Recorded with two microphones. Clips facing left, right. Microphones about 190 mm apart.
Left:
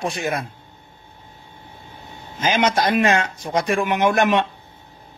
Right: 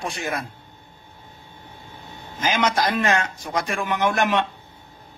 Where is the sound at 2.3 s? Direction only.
20° left (ahead or behind).